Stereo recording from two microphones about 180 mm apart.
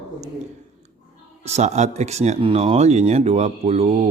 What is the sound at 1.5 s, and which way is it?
Speech, 40° right (ahead or behind).